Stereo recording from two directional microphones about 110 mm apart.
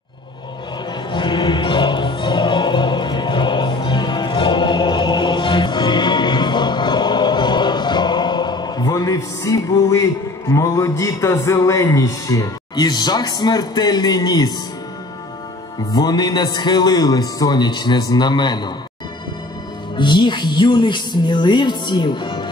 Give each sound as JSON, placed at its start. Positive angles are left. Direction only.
{"t": 1.1, "sound": "music", "side_deg": 45}
{"t": 15.9, "sound": "music", "side_deg": 40}
{"t": 20.0, "sound": "speech", "side_deg": 45}